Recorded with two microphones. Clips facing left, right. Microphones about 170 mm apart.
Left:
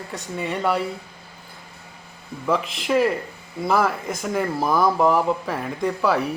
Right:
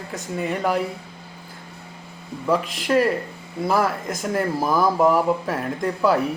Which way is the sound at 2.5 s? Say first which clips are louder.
Right 1 dB; centre (ahead or behind).